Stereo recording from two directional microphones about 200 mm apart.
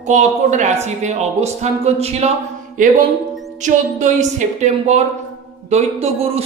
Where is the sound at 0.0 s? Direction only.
35° right (ahead or behind).